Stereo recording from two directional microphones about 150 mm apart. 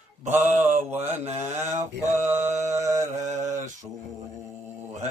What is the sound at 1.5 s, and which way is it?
Mantra, 50° right (ahead or behind).